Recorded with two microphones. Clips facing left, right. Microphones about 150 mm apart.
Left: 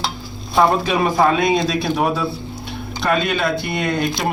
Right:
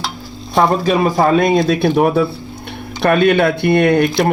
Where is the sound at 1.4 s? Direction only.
55° right (ahead or behind).